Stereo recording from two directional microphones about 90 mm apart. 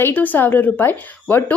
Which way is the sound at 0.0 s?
20° left (ahead or behind).